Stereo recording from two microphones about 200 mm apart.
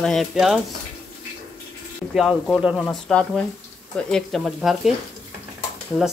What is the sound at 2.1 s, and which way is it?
Speech, centre (ahead or behind).